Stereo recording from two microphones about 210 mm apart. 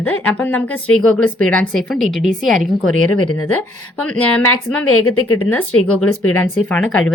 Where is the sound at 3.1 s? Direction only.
90° left.